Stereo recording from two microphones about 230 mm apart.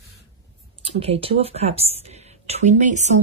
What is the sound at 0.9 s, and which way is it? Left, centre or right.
A woman's voice, right.